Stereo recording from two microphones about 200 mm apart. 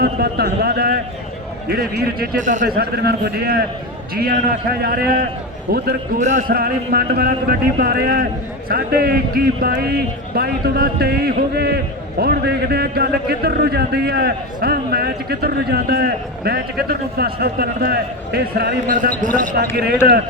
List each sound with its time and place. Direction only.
0.0 s a man's voice: 50° right (ahead or behind)